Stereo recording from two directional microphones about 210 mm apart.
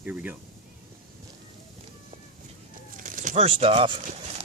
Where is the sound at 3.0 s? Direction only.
40° right (ahead or behind).